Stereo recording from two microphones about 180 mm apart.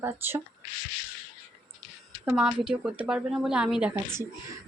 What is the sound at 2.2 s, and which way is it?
A woman's voice, 10° right (ahead or behind).